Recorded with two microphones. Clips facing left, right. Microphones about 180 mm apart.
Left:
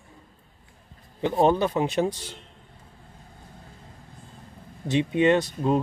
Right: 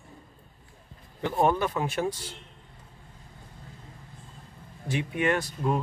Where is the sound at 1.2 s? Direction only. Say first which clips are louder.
Left 4 dB; 20° left (ahead or behind).